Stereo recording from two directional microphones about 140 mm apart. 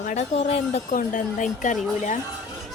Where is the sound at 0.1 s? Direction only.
50° left (ahead or behind).